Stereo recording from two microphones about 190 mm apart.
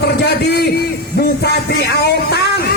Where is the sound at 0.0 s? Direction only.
60° left (ahead or behind).